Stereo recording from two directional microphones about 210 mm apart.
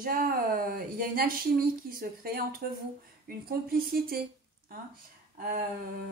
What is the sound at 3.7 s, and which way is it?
Speech, 45° right (ahead or behind).